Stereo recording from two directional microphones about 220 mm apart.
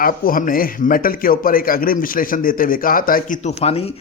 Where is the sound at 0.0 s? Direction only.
40° left (ahead or behind).